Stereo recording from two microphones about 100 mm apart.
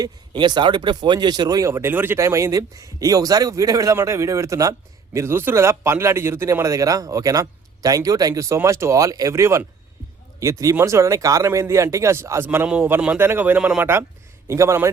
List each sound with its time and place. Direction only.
0.0 s speech: 50° right (ahead or behind); by 12.6 s 25° right (ahead or behind)
12.6 s speech: 10° right (ahead or behind)
14.4 s a man's voice: 30° right (ahead or behind)